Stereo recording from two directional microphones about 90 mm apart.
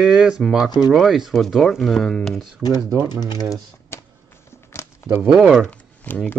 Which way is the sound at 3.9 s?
30° left (ahead or behind).